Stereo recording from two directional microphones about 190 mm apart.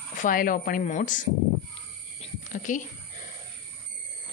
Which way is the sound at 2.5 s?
40° left (ahead or behind).